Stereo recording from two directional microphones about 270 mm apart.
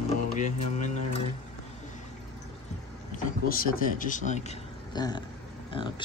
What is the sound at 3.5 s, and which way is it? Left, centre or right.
Speech, left.